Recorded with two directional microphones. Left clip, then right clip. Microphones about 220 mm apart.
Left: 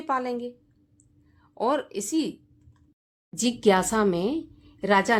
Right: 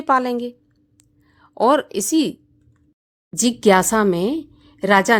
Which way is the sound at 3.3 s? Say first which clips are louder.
Right 7 dB; 30° right (ahead or behind).